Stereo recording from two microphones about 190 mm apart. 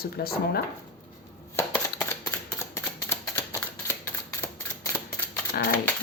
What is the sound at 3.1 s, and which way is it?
Typewriter, 15° left (ahead or behind).